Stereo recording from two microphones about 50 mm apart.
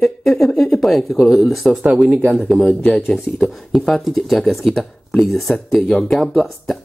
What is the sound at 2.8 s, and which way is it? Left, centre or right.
Speech, left.